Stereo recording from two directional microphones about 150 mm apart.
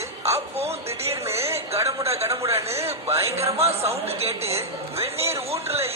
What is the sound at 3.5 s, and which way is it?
Speech, 45° right (ahead or behind).